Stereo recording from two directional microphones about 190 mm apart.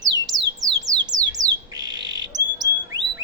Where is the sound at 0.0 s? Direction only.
Centre (ahead or behind).